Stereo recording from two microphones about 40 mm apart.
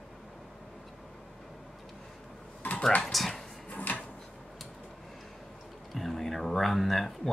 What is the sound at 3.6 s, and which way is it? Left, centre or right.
Drawer open or close, left.